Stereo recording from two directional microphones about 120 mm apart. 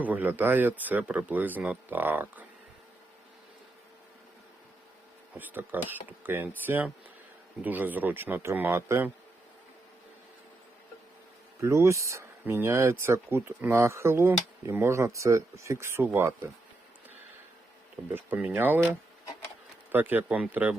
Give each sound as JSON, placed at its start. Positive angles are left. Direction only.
{"t": 0.0, "sound": "speech", "side_deg": -15}
{"t": 5.4, "sound": "speech", "side_deg": -15}
{"t": 11.6, "sound": "speech", "side_deg": -25}
{"t": 18.1, "sound": "speech", "side_deg": -15}